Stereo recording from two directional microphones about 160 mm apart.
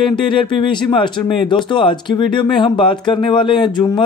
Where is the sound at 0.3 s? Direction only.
30° left (ahead or behind).